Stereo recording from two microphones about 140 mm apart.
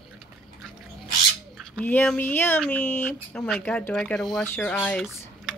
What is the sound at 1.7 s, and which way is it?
Speech, 10° left (ahead or behind).